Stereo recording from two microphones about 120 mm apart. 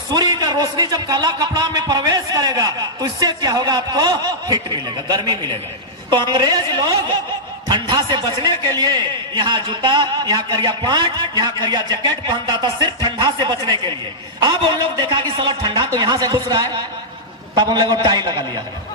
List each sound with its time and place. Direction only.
0.1 s a man's voice: 35° right (ahead or behind)